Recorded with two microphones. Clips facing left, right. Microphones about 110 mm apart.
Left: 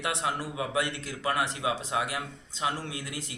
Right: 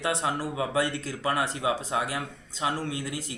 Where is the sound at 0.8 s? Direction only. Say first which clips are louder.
Right 4 dB; 20° left (ahead or behind).